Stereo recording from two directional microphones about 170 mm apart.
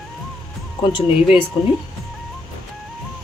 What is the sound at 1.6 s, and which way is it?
Speech, 30° left (ahead or behind).